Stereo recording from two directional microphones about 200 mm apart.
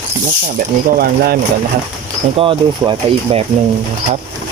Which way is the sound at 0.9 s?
50° right (ahead or behind).